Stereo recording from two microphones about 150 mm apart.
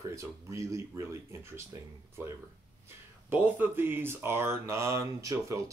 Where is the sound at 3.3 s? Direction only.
10° right (ahead or behind).